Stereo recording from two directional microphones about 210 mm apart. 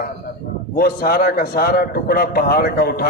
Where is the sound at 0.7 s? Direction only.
45° left (ahead or behind).